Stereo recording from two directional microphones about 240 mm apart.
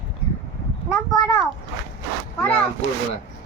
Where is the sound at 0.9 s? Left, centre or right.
Centre.